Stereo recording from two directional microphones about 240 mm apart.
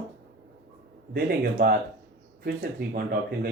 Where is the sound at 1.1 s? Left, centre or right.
Right.